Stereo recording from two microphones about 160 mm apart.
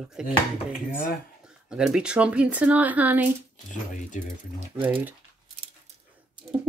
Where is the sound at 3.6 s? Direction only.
50° left (ahead or behind).